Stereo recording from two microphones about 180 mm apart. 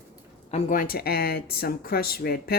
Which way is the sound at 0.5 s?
50° left (ahead or behind).